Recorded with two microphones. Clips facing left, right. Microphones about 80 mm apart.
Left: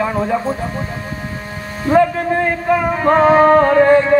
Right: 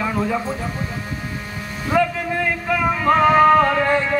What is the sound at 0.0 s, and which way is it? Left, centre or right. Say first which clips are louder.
Speech: left 4 dB; left.